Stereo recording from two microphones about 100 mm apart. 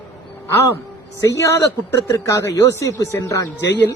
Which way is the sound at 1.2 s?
30° left (ahead or behind).